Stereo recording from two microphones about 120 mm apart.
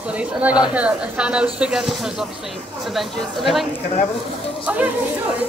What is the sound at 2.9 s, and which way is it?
Speech, centre (ahead or behind).